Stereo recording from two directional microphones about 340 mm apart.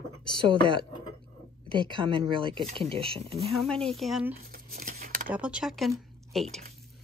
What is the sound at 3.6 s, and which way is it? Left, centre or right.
Speech, centre.